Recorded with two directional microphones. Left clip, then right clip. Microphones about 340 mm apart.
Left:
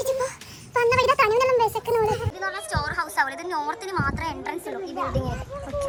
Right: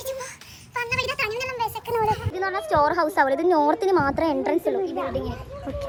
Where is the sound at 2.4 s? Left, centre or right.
Centre.